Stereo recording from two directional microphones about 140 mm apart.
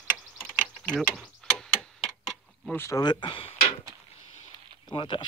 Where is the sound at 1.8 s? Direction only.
Centre (ahead or behind).